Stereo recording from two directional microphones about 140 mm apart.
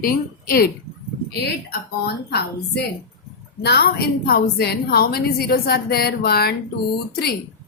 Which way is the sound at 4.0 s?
90° left.